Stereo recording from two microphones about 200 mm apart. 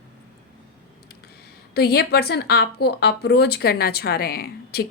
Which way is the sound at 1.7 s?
50° left (ahead or behind).